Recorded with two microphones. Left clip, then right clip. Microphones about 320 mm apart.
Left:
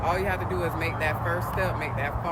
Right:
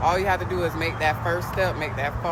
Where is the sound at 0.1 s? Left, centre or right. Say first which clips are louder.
Right 4 dB; centre.